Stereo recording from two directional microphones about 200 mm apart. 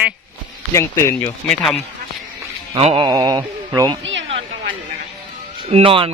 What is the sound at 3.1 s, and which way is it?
Speech, 20° right (ahead or behind).